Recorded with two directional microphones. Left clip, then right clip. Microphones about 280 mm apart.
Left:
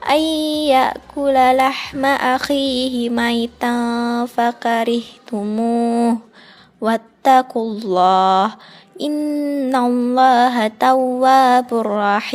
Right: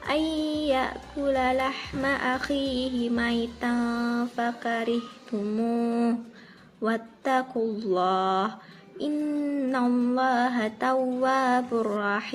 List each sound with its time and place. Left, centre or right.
0.0 s speech: left
5.5 s mantra: left
6.8 s speech: left